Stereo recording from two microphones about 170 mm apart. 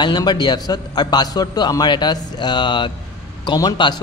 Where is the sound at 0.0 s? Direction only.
25° left (ahead or behind).